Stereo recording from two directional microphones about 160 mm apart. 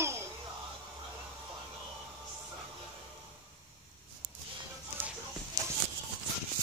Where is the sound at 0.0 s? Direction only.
15° right (ahead or behind).